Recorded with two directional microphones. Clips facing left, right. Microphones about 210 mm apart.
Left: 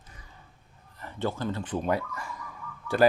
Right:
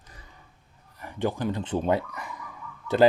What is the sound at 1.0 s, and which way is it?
Speech, 15° right (ahead or behind).